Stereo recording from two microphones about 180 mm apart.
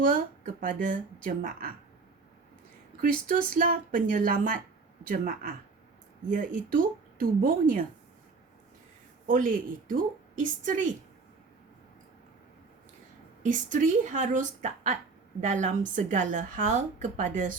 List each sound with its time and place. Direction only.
0.0 s a woman's voice: 45° right (ahead or behind)
3.0 s a woman's voice: 45° right (ahead or behind)
9.2 s a woman's voice: 45° right (ahead or behind)
13.4 s a woman's voice: 45° right (ahead or behind)